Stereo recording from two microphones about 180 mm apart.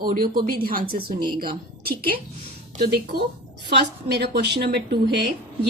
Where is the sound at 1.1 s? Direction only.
25° right (ahead or behind).